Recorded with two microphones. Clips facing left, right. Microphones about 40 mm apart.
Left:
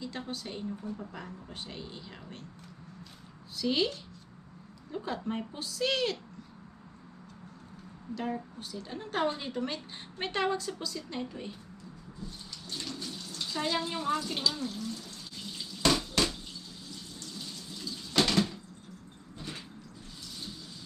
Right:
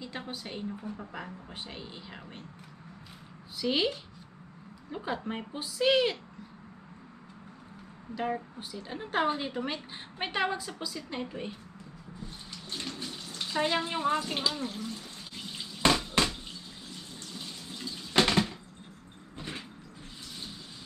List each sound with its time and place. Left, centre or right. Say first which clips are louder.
0.0 s speech: left 1 dB; centre
3.5 s speech: right 1 dB; centre
8.1 s speech: right 2 dB; centre
12.2 s bathtub: even; right
17.2 s water: even; right
19.3 s vehicle: right 2 dB; right